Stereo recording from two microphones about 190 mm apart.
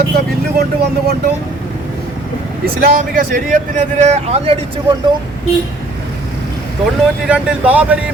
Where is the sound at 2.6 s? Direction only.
50° right (ahead or behind); by 4.6 s 35° right (ahead or behind).